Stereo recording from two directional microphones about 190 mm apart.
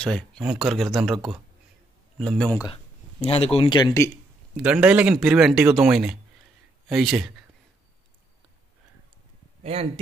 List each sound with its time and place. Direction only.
0.0 s speech: 5° left (ahead or behind)
3.2 s speech: 30° left (ahead or behind)
4.6 s speech: 5° right (ahead or behind)
9.6 s a sound: 30° right (ahead or behind)